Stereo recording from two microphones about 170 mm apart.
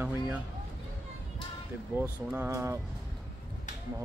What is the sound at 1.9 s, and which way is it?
Speech, 10° right (ahead or behind).